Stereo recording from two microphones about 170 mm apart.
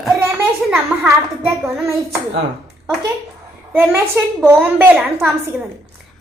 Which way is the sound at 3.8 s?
15° right (ahead or behind).